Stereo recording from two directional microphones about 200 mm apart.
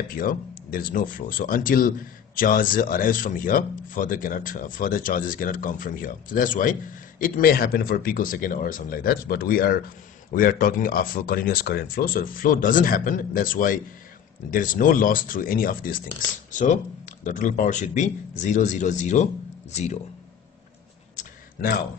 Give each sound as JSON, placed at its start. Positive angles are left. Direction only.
{"t": 0.1, "sound": "speech", "side_deg": 45}
{"t": 17.2, "sound": "speech", "side_deg": 40}
{"t": 21.2, "sound": "a sound", "side_deg": 45}